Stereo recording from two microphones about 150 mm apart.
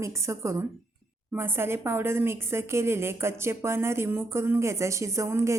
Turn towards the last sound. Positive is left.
turn(degrees=-20)  # may be behind; listen again after turning